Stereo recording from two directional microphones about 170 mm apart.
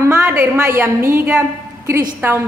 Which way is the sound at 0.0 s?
15° right (ahead or behind).